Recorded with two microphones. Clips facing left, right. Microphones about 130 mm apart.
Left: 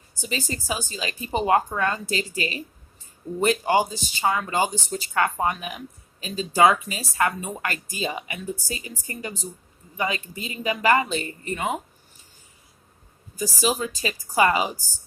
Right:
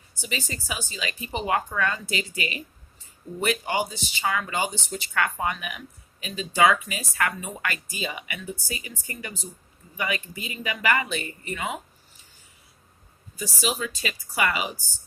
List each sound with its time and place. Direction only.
0.2 s speech: 40° left (ahead or behind)
13.4 s speech: 40° left (ahead or behind)